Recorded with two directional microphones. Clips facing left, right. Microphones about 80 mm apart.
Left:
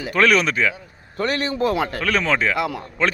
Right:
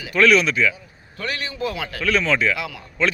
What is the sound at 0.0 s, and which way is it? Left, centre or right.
A man's voice, left.